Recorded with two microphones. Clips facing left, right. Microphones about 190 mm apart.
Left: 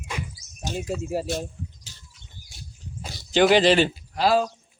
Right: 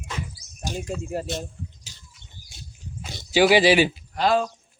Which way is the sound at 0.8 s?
5° left (ahead or behind).